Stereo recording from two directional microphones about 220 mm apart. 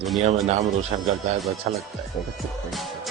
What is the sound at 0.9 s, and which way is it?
Speech, 25° right (ahead or behind).